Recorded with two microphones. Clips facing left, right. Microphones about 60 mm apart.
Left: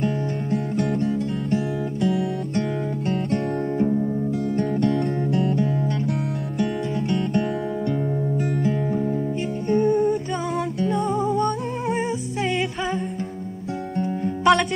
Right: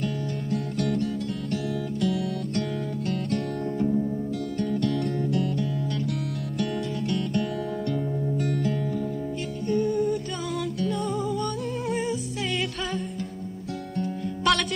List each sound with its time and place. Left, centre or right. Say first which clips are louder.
0.0 s music: left 5 dB; left
0.8 s music: left 3 dB; left
3.8 s music: left 2 dB; left
8.4 s music: left 3 dB; centre
9.7 s music: left 5 dB; left
10.8 s music: left 6 dB; left
14.2 s music: left 7 dB; left